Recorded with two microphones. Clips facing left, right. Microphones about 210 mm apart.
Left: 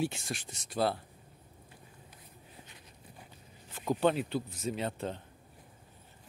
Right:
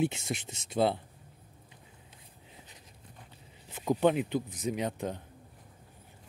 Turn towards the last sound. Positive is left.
turn(degrees=-15)  # may be behind; listen again after turning